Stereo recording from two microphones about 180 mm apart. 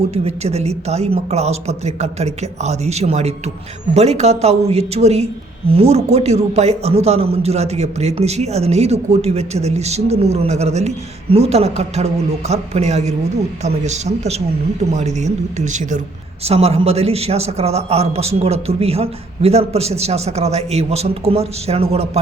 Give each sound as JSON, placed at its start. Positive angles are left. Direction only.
{"t": 0.1, "sound": "a man's voice", "side_deg": -35}